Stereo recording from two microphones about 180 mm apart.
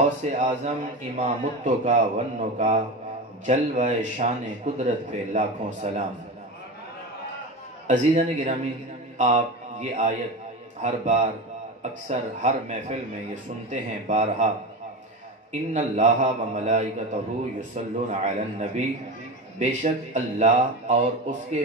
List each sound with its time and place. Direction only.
0.0 s a man's voice: 45° right (ahead or behind)
7.8 s a man's voice: 45° right (ahead or behind)
15.7 s a man's voice: 40° right (ahead or behind)